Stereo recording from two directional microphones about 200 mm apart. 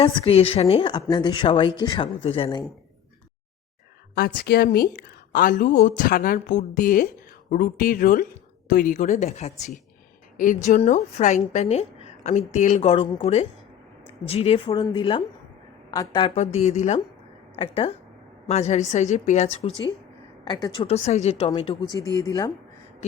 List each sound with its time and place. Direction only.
0.0 s speech: 25° left (ahead or behind)
4.4 s a woman's voice: 50° left (ahead or behind); by 16.3 s 20° left (ahead or behind)
16.3 s a woman's voice: 35° left (ahead or behind)
20.5 s speech: 20° left (ahead or behind)